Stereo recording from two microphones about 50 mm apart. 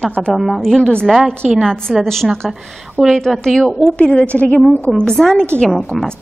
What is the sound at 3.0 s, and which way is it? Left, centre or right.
Speech, right.